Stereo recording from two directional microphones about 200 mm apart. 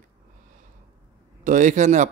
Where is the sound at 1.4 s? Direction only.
40° right (ahead or behind).